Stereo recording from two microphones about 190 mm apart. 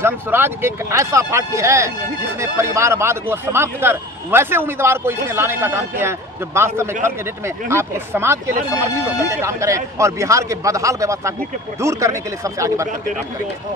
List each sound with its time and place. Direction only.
0.0 s speech: 10° right (ahead or behind)